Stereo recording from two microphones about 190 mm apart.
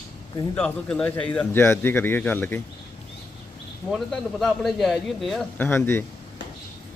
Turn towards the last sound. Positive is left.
turn(degrees=10)  # may be behind; listen again after turning